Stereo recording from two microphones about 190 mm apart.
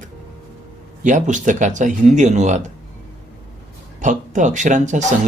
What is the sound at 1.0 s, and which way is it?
Speech, 40° right (ahead or behind).